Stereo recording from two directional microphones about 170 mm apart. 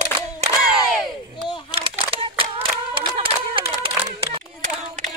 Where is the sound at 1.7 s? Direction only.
35° right (ahead or behind).